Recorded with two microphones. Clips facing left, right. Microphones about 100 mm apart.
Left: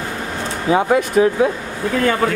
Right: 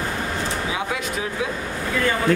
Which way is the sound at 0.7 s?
45° left (ahead or behind).